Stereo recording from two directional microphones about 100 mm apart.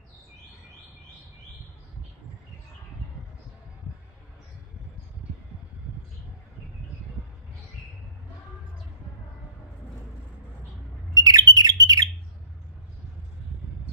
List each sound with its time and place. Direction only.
11.1 s bird: 40° right (ahead or behind)